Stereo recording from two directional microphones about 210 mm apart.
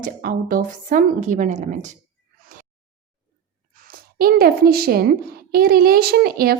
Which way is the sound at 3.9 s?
45° right (ahead or behind).